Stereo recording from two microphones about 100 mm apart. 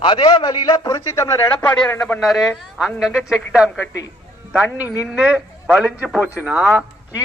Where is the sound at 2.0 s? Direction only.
15° left (ahead or behind).